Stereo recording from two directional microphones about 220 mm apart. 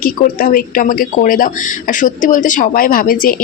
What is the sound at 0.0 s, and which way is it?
Speech, 40° left (ahead or behind).